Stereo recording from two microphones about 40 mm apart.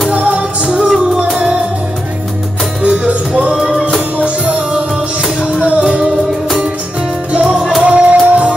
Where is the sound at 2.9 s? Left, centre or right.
Right.